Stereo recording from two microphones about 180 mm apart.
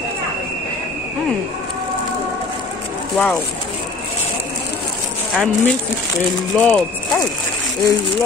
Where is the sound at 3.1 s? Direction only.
Centre (ahead or behind).